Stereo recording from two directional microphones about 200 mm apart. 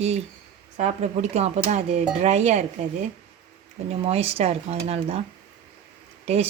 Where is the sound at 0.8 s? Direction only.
35° right (ahead or behind).